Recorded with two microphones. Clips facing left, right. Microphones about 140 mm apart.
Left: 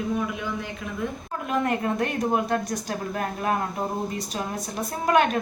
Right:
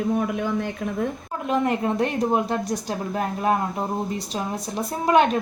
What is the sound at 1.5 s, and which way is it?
Speech, 25° right (ahead or behind).